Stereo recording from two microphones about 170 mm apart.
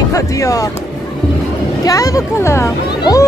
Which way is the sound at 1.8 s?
20° left (ahead or behind).